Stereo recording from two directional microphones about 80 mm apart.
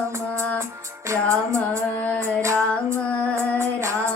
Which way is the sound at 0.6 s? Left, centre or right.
Right.